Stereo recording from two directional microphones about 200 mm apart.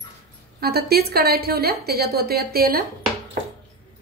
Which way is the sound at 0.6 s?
50° right (ahead or behind).